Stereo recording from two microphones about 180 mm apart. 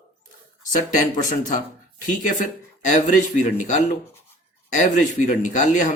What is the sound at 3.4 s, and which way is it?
A man's voice, 40° left (ahead or behind).